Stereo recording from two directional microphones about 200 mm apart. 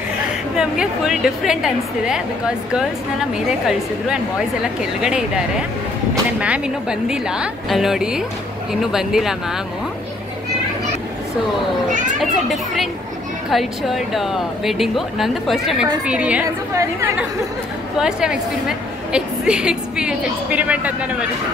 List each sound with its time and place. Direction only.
0.6 s a woman's voice: 5° right (ahead or behind)
12.2 s a woman's voice: centre (ahead or behind); by 17.1 s 15° right (ahead or behind)
17.9 s a woman's voice: 5° right (ahead or behind)